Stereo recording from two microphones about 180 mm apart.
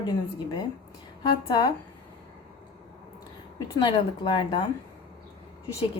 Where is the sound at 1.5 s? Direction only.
25° left (ahead or behind).